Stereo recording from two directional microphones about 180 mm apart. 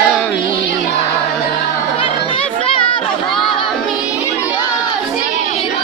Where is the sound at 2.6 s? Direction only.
30° left (ahead or behind).